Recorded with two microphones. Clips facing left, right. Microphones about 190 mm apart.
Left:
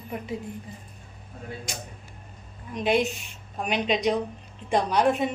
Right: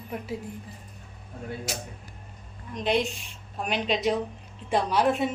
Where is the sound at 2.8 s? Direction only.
5° left (ahead or behind).